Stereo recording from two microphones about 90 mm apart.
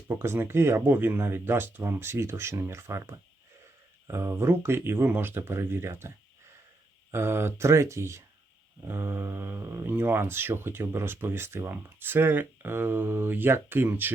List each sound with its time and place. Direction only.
0.2 s speech: 25° right (ahead or behind)